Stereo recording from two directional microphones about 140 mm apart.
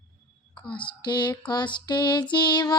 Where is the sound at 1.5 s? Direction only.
30° left (ahead or behind).